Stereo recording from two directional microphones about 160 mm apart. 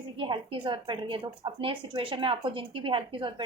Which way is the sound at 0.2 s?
30° right (ahead or behind).